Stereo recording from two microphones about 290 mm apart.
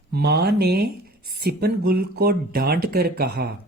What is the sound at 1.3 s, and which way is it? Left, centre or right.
Speech, right.